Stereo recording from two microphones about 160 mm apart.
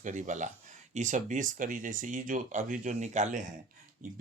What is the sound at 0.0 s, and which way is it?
Speech, 50° right (ahead or behind).